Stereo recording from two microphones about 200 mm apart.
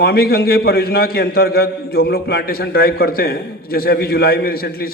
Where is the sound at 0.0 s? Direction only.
50° left (ahead or behind).